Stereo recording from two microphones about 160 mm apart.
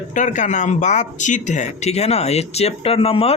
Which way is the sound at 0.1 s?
50° left (ahead or behind).